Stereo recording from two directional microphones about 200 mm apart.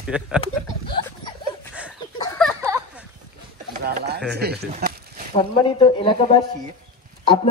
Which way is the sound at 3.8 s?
55° right (ahead or behind).